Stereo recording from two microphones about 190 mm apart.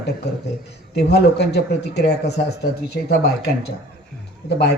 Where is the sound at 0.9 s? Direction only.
60° left (ahead or behind).